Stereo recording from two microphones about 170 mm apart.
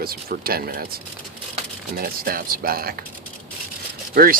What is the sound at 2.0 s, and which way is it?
Speech, 60° right (ahead or behind).